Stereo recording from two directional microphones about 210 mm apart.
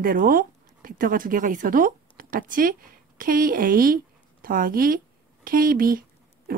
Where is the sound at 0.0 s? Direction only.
45° right (ahead or behind).